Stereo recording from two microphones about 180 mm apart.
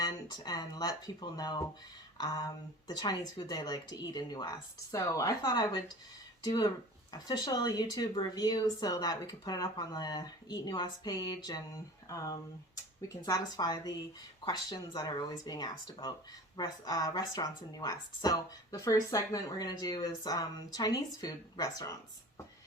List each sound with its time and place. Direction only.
0.0 s speech: 25° left (ahead or behind)
2.1 s a sound: 25° left (ahead or behind)
2.8 s speech: 25° left (ahead or behind)